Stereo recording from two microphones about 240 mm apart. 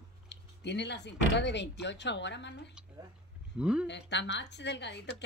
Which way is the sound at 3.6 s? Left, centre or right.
Centre.